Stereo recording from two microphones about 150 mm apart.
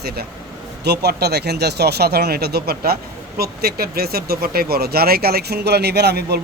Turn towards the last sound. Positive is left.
turn(degrees=-90)